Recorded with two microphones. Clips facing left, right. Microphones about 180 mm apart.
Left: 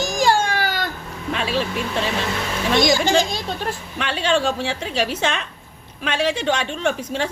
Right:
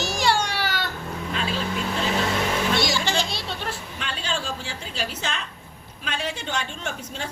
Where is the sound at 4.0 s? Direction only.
75° left (ahead or behind).